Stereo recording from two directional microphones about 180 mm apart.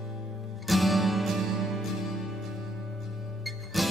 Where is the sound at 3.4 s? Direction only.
Centre (ahead or behind).